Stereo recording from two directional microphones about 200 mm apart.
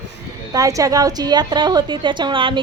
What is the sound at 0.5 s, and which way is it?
A woman's voice, 15° right (ahead or behind).